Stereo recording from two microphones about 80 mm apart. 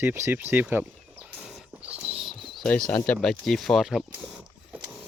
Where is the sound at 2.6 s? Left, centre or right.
Centre.